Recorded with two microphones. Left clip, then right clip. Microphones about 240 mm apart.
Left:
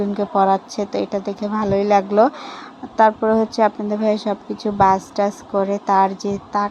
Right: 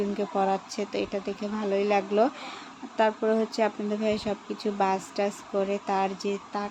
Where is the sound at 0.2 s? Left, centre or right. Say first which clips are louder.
Left 12 dB; centre.